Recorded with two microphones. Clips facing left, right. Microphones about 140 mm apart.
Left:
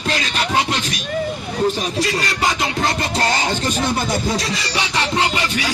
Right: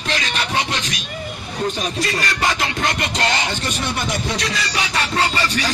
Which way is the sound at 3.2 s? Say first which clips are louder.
Left 1 dB; 40° left (ahead or behind).